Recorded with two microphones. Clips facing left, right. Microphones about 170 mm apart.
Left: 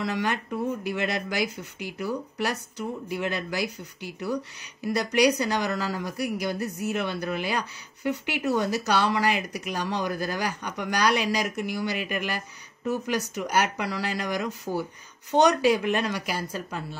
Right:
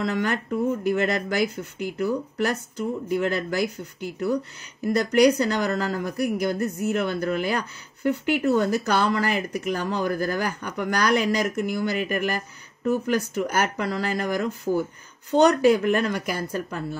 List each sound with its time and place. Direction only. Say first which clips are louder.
0.1 s speech: right 3 dB; 50° right (ahead or behind)